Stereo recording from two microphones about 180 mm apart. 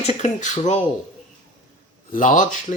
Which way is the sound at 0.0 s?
40° left (ahead or behind).